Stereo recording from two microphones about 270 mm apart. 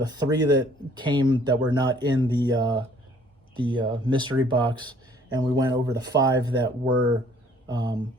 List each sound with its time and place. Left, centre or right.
0.0 s speech: centre